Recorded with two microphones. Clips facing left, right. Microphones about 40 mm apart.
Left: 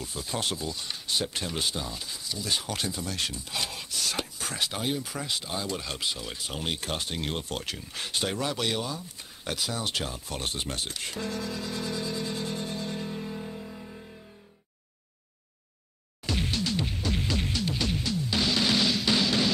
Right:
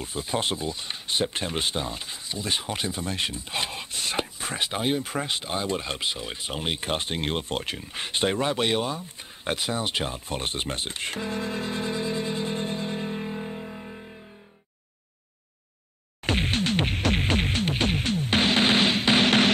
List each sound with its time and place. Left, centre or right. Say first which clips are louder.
0.0 s speech: right 4 dB; right
16.3 s music: right 5 dB; right